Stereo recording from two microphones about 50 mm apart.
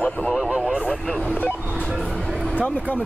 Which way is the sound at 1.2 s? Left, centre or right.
Left.